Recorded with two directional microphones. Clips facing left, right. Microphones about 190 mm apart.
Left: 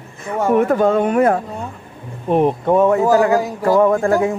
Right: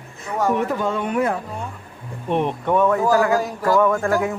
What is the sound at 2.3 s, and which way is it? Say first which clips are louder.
A man's voice: left 6 dB; 40° left (ahead or behind).